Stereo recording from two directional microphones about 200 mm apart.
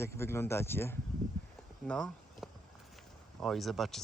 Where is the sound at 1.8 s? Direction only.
5° left (ahead or behind).